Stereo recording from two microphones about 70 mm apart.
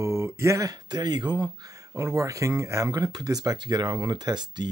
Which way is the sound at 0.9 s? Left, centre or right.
Right.